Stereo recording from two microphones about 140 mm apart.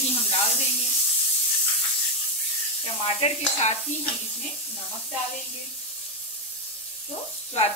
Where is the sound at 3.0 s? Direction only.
45° left (ahead or behind).